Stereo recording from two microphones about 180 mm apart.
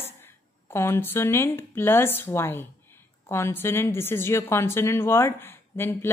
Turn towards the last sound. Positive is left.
turn(degrees=15)  # may be behind; listen again after turning